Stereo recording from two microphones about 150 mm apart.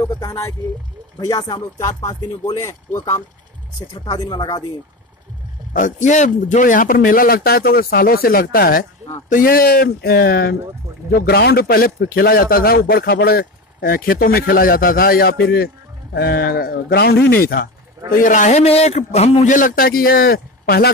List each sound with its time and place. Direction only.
0.0 s speech: 20° left (ahead or behind)
5.7 s a man's voice: 60° left (ahead or behind); by 17.6 s 90° left
18.2 s a man's voice: 55° left (ahead or behind); by 20.9 s 90° left